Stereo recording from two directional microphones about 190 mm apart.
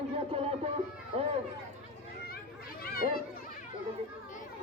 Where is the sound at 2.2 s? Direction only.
50° left (ahead or behind).